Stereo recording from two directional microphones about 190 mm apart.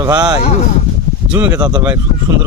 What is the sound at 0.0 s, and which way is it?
Speech, 20° right (ahead or behind).